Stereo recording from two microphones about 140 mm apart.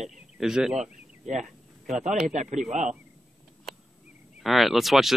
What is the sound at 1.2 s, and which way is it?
Speech, 60° right (ahead or behind).